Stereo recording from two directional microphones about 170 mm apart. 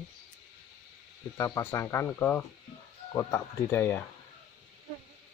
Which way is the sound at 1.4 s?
20° left (ahead or behind).